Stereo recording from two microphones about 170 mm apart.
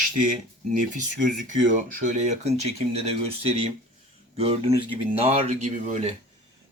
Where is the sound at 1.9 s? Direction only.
45° right (ahead or behind).